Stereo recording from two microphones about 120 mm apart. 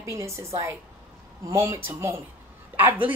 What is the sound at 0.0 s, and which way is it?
Speech, 25° right (ahead or behind).